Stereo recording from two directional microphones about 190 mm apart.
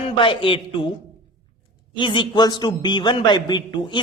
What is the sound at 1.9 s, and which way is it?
A man's voice, 25° left (ahead or behind).